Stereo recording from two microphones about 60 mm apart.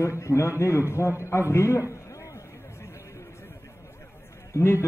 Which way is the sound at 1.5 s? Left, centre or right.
Left.